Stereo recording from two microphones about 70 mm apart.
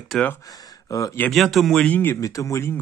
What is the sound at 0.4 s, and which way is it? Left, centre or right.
Speech, left.